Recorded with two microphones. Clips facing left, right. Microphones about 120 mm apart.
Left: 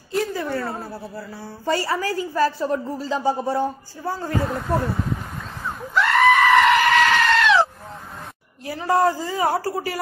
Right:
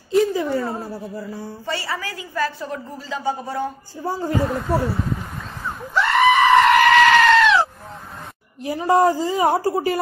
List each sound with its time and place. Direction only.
0.1 s a sound: 15° right (ahead or behind)
0.6 s a woman's voice: 5° right (ahead or behind)
1.7 s a woman's voice: 40° left (ahead or behind)
4.0 s a woman's voice: 15° right (ahead or behind)
4.5 s speech: centre (ahead or behind)
5.8 s goat: centre (ahead or behind)
8.6 s a woman's voice: 20° right (ahead or behind)